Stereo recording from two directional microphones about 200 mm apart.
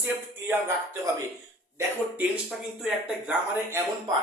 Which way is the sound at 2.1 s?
5° right (ahead or behind).